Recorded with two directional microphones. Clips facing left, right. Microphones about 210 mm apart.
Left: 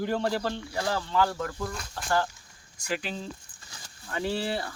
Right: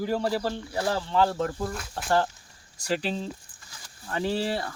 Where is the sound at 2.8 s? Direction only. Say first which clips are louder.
Right 4 dB; 35° right (ahead or behind).